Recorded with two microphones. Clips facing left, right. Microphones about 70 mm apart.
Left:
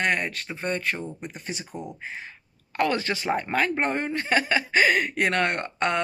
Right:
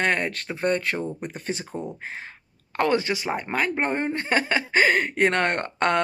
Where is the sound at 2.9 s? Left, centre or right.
Centre; by 6.0 s right.